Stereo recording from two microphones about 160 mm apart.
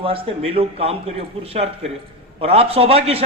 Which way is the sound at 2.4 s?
40° right (ahead or behind).